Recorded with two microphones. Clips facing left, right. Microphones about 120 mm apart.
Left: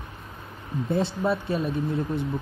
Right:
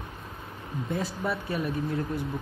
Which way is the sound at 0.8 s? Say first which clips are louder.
Left 6 dB; 30° left (ahead or behind).